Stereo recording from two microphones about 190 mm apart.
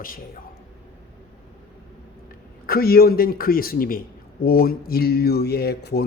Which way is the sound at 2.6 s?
55° left (ahead or behind).